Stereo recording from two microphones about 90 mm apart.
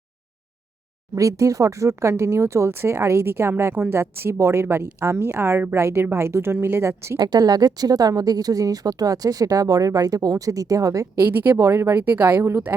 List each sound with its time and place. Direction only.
1.1 s speech: 35° right (ahead or behind)
7.2 s speech: 50° right (ahead or behind)
11.2 s speech: 25° right (ahead or behind)